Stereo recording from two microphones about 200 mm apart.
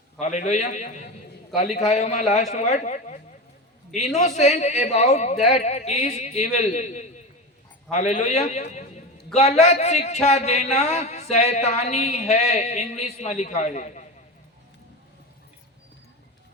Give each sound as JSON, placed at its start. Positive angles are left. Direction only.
{"t": 0.2, "sound": "a man's voice", "side_deg": 35}